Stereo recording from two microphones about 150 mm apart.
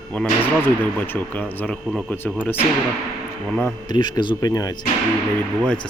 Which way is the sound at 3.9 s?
30° left (ahead or behind).